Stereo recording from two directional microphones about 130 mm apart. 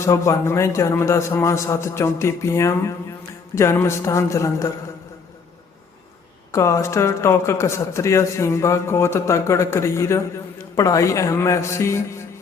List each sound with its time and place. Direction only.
0.0 s speech: 25° left (ahead or behind)
6.5 s speech: 25° left (ahead or behind)